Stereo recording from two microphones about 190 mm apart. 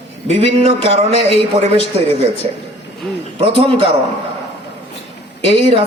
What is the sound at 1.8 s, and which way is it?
Speech, 35° right (ahead or behind).